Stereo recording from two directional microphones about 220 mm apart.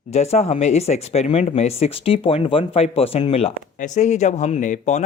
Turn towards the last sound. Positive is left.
turn(degrees=35)  # may be behind; listen again after turning